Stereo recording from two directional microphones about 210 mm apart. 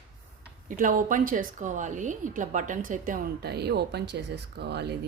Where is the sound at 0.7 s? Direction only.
40° right (ahead or behind).